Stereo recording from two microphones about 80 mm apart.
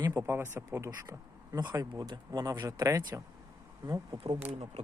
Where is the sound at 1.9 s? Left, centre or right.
Right.